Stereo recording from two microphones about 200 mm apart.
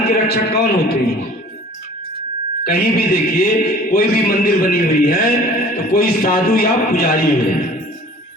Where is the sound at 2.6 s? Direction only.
50° left (ahead or behind).